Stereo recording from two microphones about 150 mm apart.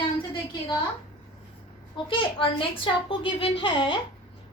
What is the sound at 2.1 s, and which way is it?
A child's voice, 35° left (ahead or behind).